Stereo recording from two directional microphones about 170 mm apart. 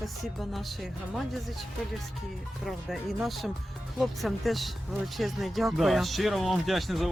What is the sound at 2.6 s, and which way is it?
Speech, centre (ahead or behind).